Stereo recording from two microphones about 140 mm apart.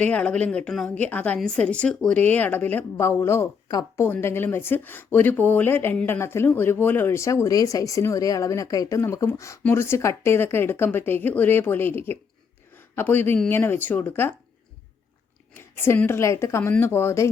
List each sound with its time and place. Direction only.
0.0 s speech: 10° left (ahead or behind)
15.5 s speech: 15° left (ahead or behind)